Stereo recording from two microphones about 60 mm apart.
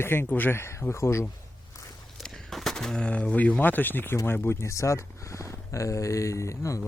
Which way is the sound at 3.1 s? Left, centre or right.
Left.